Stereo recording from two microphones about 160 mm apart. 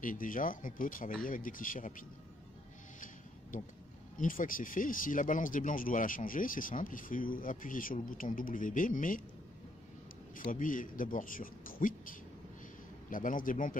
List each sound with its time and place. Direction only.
0.0 s speech: 55° left (ahead or behind)
3.5 s speech: 55° left (ahead or behind)
10.5 s speech: 55° left (ahead or behind)